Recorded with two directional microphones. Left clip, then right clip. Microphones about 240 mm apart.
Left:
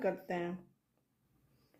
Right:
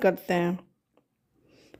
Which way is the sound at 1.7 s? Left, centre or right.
Right.